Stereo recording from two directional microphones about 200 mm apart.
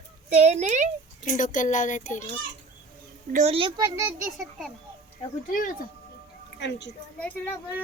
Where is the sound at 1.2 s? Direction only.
40° left (ahead or behind).